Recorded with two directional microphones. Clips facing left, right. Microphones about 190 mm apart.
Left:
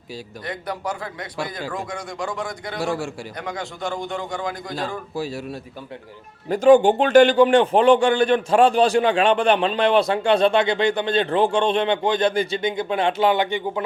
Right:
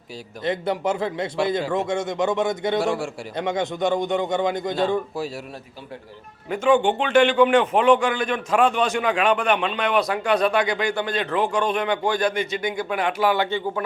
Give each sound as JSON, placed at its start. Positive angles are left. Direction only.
{"t": 0.4, "sound": "a man's voice", "side_deg": -25}
{"t": 6.5, "sound": "a man's voice", "side_deg": 40}